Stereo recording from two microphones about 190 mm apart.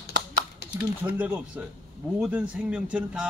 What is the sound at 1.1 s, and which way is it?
A man's voice, 10° right (ahead or behind).